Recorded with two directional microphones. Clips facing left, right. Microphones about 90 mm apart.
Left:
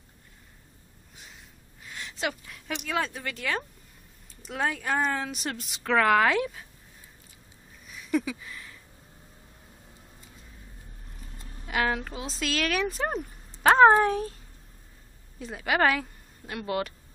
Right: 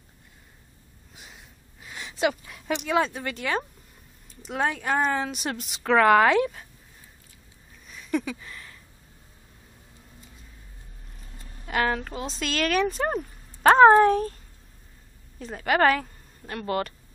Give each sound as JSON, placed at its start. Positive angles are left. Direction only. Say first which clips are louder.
{"t": 1.1, "sound": "a sound", "louder": "right 2 dB", "side_deg": -10}
{"t": 1.9, "sound": "gasp", "louder": "right 7 dB", "side_deg": -10}
{"t": 2.4, "sound": "speech", "louder": "right 6 dB", "side_deg": -15}
{"t": 4.8, "sound": "speech", "louder": "right 3 dB", "side_deg": -5}
{"t": 7.9, "sound": "a sound", "louder": "even", "side_deg": 10}
{"t": 11.6, "sound": "speech", "louder": "right 2 dB", "side_deg": 5}
{"t": 15.3, "sound": "a woman's voice", "louder": "right 3 dB", "side_deg": 5}